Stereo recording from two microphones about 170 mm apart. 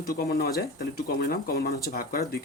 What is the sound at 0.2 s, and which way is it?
Speech, 65° left (ahead or behind).